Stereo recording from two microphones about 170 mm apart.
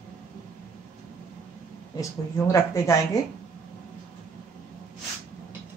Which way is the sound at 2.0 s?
20° left (ahead or behind).